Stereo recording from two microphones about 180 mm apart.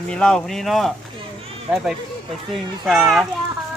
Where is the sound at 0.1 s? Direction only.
5° left (ahead or behind).